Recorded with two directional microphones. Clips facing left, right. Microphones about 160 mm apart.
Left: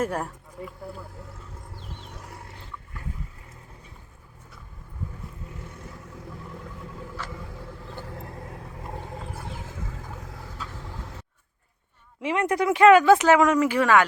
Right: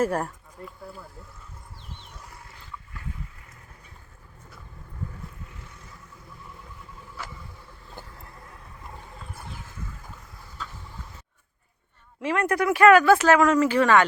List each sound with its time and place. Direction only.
0.0 s speech: centre (ahead or behind)
7.2 s vehicle: 10° right (ahead or behind)
8.0 s vehicle: 75° left (ahead or behind); by 9.1 s 55° left (ahead or behind)
9.8 s vehicle: 90° left
12.2 s speech: 20° left (ahead or behind)